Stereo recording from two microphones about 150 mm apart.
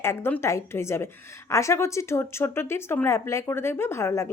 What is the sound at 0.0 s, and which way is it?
Speech, 15° left (ahead or behind).